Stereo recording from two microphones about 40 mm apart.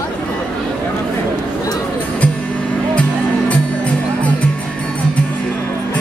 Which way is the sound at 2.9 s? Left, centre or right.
Left.